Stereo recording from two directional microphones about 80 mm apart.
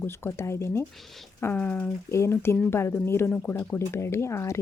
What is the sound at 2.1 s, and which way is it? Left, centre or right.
Speech, left.